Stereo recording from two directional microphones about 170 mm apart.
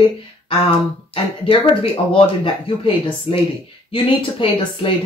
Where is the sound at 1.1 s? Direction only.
35° left (ahead or behind).